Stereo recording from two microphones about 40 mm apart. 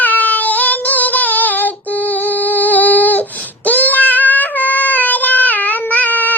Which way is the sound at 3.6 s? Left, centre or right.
Left.